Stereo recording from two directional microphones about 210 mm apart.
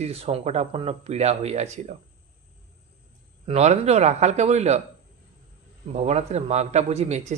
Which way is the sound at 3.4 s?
30° right (ahead or behind).